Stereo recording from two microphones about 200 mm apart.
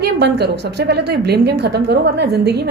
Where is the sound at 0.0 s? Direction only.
55° right (ahead or behind).